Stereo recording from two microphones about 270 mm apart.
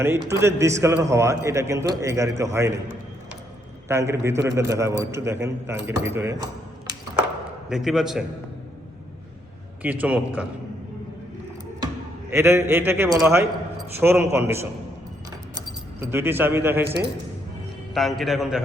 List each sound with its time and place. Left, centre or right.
0.3 s a man's voice: centre
3.8 s a man's voice: centre
7.7 s a man's voice: centre
9.8 s a man's voice: centre
12.3 s a man's voice: centre
16.8 s speech: right
17.9 s a man's voice: centre